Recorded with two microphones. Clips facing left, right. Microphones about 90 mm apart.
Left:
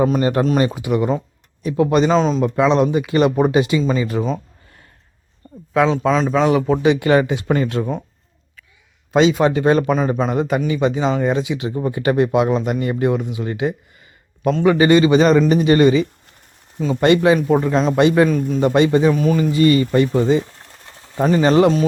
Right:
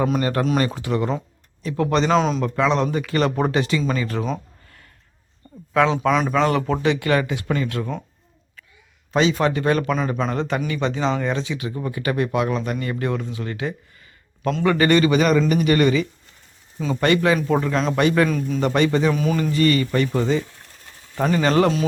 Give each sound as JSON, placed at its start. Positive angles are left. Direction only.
{"t": 0.2, "sound": "speech", "side_deg": 20}
{"t": 2.1, "sound": "a man's voice", "side_deg": 0}
{"t": 2.4, "sound": "speech", "side_deg": 15}
{"t": 5.7, "sound": "speech", "side_deg": 5}
{"t": 6.8, "sound": "speech", "side_deg": 20}
{"t": 9.1, "sound": "speech", "side_deg": 20}
{"t": 17.3, "sound": "speech", "side_deg": 10}
{"t": 17.9, "sound": "speech", "side_deg": 20}
{"t": 18.3, "sound": "a man's voice", "side_deg": 0}
{"t": 18.6, "sound": "speech", "side_deg": 20}
{"t": 19.1, "sound": "a man's voice", "side_deg": 0}
{"t": 19.5, "sound": "speech", "side_deg": 15}